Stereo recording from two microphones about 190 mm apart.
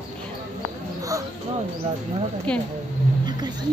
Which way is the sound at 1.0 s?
15° right (ahead or behind).